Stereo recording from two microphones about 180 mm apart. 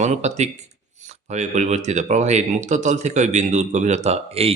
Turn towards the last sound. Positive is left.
turn(degrees=-35)  # may be behind; listen again after turning